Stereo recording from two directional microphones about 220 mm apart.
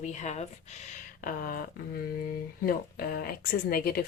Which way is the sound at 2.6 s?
45° left (ahead or behind).